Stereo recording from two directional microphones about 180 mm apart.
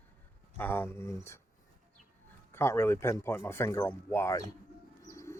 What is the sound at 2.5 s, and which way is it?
Speech, 15° left (ahead or behind).